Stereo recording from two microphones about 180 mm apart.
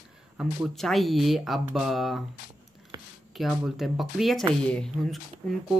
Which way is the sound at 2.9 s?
20° right (ahead or behind).